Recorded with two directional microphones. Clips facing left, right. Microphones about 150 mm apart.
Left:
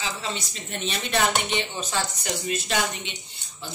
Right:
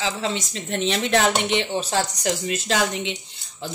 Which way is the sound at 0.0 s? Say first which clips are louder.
Right 6 dB; 90° right.